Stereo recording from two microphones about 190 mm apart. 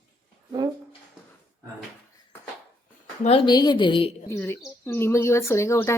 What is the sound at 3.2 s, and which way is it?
Speech, 25° left (ahead or behind).